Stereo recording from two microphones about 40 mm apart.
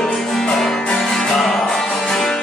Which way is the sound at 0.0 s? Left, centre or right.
Centre.